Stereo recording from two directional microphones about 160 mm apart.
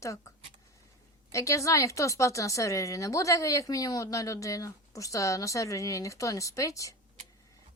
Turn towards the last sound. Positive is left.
turn(degrees=20)  # may be behind; listen again after turning